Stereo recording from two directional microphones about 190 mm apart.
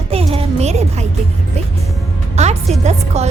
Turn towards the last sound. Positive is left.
turn(degrees=-35)  # may be behind; listen again after turning